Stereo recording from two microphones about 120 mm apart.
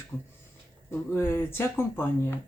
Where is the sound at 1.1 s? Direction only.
20° left (ahead or behind).